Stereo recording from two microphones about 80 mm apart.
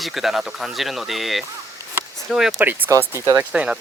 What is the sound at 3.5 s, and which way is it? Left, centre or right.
Speech, centre.